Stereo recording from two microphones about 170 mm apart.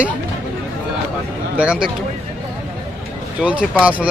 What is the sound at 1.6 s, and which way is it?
Speech, 5° right (ahead or behind).